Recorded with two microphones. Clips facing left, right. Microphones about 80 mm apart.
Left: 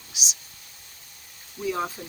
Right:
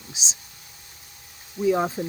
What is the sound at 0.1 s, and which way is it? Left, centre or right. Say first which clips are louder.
Speech: even; right.